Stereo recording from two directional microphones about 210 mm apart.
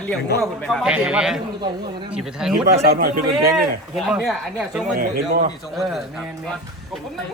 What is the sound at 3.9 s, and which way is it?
Speech, centre (ahead or behind).